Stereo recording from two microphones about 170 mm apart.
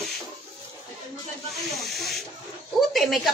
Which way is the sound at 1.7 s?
Centre (ahead or behind).